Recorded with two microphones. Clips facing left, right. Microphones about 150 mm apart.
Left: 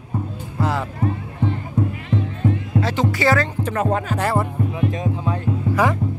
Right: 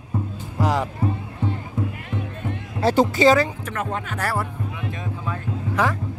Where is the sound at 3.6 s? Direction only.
35° left (ahead or behind).